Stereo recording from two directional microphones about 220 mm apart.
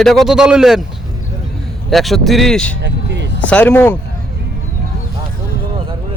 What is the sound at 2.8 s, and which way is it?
Vehicle, 50° right (ahead or behind).